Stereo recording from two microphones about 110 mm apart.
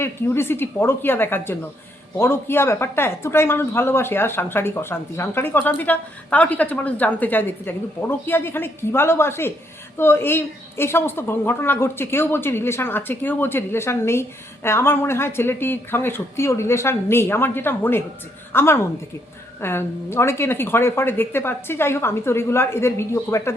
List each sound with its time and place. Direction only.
0.0 s a woman's voice: 20° left (ahead or behind)